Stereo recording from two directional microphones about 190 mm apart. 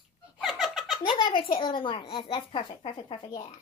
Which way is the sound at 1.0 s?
25° left (ahead or behind).